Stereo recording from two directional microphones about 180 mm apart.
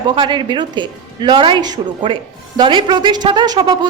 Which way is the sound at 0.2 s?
25° right (ahead or behind).